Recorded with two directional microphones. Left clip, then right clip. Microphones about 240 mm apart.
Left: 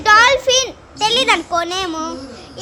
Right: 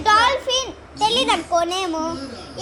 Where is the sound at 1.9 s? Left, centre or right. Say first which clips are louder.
Left 1 dB; centre.